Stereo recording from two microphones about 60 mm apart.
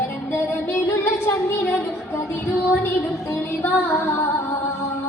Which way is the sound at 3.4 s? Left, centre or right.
Left.